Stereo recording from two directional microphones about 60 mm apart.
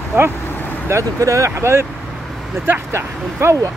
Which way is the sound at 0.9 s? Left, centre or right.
Right.